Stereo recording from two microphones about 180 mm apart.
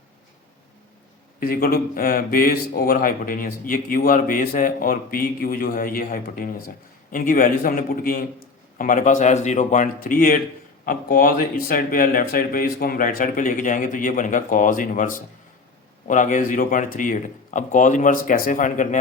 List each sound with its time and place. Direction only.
1.4 s speech: 55° left (ahead or behind)